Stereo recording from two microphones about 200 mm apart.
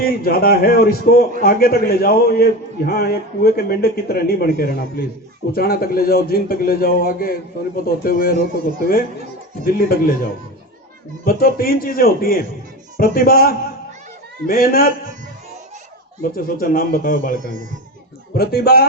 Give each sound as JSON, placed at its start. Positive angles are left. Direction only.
{"t": 0.0, "sound": "a man's voice", "side_deg": 50}
{"t": 9.6, "sound": "a man's voice", "side_deg": 50}
{"t": 11.3, "sound": "a man's voice", "side_deg": 45}
{"t": 16.3, "sound": "a man's voice", "side_deg": 45}
{"t": 18.3, "sound": "a man's voice", "side_deg": 50}